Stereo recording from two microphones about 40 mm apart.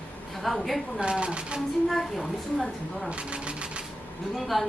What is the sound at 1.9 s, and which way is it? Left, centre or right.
Speech, centre.